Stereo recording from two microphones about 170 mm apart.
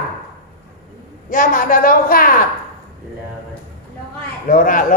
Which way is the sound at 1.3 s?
55° left (ahead or behind).